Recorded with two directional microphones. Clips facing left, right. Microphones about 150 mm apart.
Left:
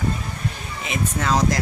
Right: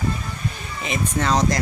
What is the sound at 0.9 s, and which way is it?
Speech, 5° left (ahead or behind).